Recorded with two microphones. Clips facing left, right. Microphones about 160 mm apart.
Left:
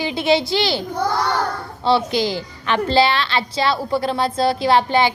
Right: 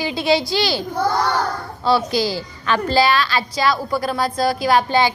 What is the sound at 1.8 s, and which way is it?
A woman's voice, 20° left (ahead or behind).